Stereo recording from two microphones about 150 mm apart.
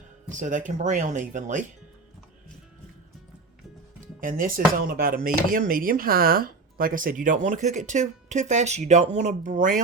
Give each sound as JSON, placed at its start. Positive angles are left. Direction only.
{"t": 0.3, "sound": "speech", "side_deg": -60}
{"t": 4.0, "sound": "speech", "side_deg": -65}